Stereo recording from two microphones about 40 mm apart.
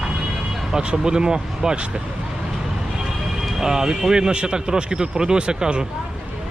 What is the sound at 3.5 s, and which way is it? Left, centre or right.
Speech, centre.